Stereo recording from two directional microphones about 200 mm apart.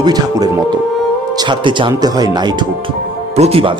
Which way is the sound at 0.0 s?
20° right (ahead or behind).